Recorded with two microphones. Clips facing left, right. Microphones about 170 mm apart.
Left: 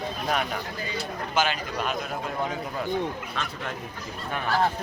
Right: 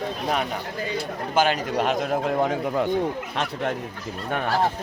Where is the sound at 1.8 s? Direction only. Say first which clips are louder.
Right 7 dB; 90° right.